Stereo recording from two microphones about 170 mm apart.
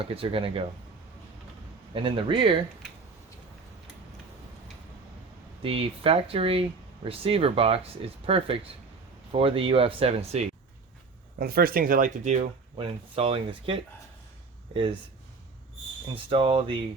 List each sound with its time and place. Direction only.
0.0 s speech: 35° right (ahead or behind)
1.9 s a man's voice: 30° right (ahead or behind)
5.6 s speech: 35° right (ahead or behind)
11.3 s speech: 60° right (ahead or behind); by 12.5 s 45° right (ahead or behind)
12.7 s speech: 30° right (ahead or behind)
16.1 s speech: 30° right (ahead or behind)